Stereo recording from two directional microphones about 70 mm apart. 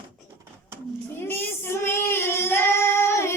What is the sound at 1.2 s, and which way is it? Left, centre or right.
Female singing, left.